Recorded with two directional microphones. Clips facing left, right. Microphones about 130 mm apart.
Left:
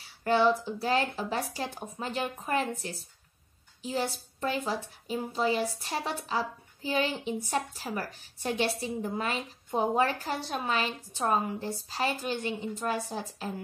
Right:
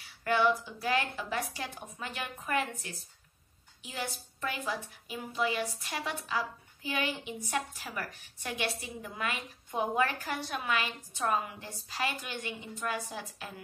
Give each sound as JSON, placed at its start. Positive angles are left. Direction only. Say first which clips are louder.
{"t": 0.2, "sound": "a woman's voice", "louder": "left 3 dB", "side_deg": 30}